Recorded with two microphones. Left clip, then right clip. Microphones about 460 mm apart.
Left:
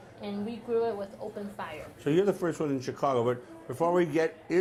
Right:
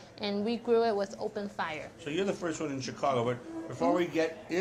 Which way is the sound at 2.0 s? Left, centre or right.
Left.